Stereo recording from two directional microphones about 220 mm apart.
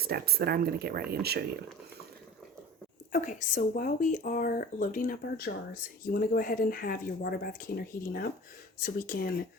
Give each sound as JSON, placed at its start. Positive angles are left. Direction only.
{"t": 0.0, "sound": "speech", "side_deg": -45}
{"t": 3.1, "sound": "speech", "side_deg": 35}